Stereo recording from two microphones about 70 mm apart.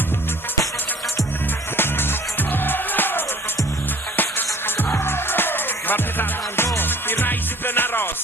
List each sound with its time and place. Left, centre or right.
1.7 s music: left